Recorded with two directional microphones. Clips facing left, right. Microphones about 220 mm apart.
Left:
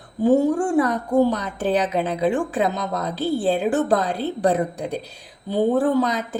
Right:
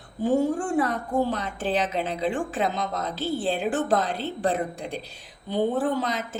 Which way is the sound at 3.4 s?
40° left (ahead or behind).